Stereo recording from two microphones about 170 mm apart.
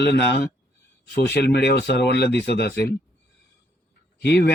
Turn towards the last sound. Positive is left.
turn(degrees=75)  # may be behind; listen again after turning